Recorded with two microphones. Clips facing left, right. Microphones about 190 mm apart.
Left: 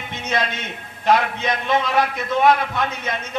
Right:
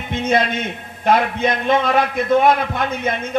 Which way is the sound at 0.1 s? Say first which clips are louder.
Right 7 dB; 55° right (ahead or behind).